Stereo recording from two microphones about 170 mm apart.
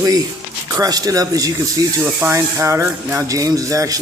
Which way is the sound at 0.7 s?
20° right (ahead or behind).